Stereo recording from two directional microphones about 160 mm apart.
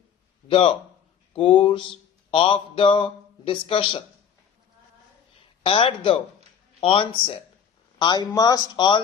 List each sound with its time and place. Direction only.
0.5 s a man's voice: 35° left (ahead or behind)
5.6 s a man's voice: 35° left (ahead or behind)